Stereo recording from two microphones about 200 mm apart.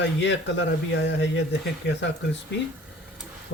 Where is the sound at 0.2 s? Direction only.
65° left (ahead or behind).